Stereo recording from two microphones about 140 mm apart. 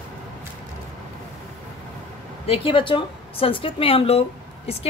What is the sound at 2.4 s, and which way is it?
Speech, 45° left (ahead or behind).